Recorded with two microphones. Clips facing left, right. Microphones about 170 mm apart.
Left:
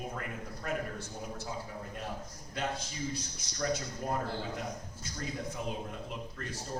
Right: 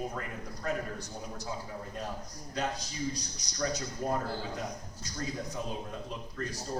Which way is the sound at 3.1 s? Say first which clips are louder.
Left 1 dB; 40° right (ahead or behind).